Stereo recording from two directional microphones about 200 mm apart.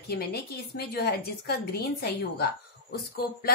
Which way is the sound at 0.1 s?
55° left (ahead or behind).